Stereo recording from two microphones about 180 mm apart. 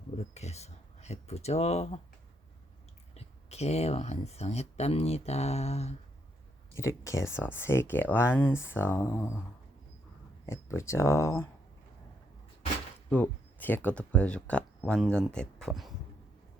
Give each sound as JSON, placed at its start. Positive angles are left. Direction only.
{"t": 0.3, "sound": "speech", "side_deg": 35}
{"t": 3.2, "sound": "speech", "side_deg": 35}
{"t": 6.7, "sound": "speech", "side_deg": 15}
{"t": 10.4, "sound": "speech", "side_deg": 15}
{"t": 13.1, "sound": "speech", "side_deg": 10}